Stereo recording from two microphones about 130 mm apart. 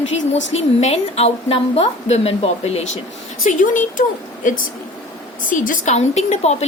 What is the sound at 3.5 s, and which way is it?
A woman's voice, 85° left.